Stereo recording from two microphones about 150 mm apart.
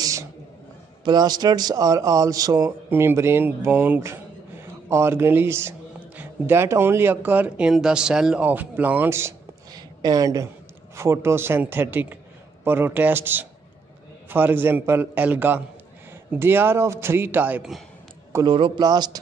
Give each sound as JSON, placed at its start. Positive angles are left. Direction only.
{"t": 0.0, "sound": "a sound", "side_deg": -20}
{"t": 1.0, "sound": "a man's voice", "side_deg": -25}
{"t": 18.4, "sound": "a man's voice", "side_deg": -30}